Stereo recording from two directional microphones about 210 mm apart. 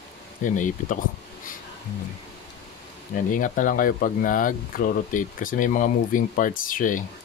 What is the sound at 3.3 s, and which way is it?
Speech, 40° left (ahead or behind).